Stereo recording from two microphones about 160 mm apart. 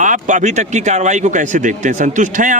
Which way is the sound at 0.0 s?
50° right (ahead or behind).